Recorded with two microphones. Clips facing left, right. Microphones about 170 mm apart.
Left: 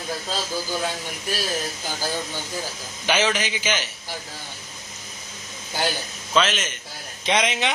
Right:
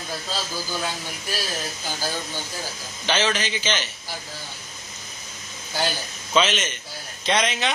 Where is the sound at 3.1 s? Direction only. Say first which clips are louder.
Left 1 dB; 10° left (ahead or behind).